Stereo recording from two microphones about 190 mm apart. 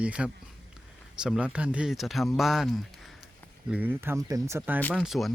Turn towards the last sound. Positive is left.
turn(degrees=0)  # may be behind; listen again after turning